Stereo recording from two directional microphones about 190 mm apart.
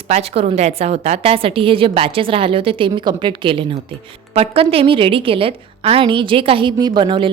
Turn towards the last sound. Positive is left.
turn(degrees=-25)  # may be behind; listen again after turning